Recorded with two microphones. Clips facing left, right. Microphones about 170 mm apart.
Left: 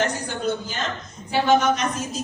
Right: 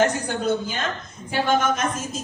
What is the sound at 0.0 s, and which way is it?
A woman's voice, 50° right (ahead or behind).